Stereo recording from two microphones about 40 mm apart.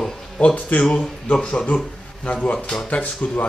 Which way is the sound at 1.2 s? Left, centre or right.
Left.